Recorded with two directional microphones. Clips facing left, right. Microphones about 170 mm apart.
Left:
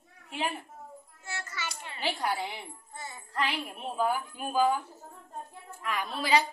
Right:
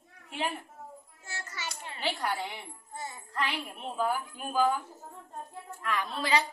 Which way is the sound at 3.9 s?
5° left (ahead or behind).